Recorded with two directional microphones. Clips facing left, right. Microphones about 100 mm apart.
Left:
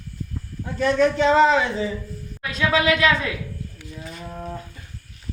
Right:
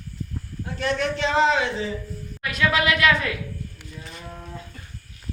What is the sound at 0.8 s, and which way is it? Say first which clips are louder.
A man's voice: left 7 dB; 40° left (ahead or behind).